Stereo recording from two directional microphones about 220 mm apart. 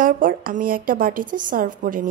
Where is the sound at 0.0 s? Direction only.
40° right (ahead or behind).